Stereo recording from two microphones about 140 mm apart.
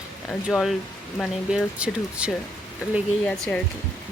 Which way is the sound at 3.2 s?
10° left (ahead or behind).